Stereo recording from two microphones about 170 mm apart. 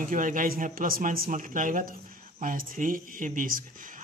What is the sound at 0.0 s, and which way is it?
Speech, 50° right (ahead or behind).